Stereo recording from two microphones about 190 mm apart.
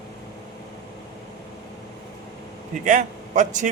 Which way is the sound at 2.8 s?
40° right (ahead or behind).